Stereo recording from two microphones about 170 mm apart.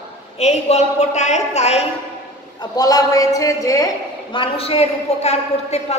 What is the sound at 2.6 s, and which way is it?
A man's voice, 20° left (ahead or behind).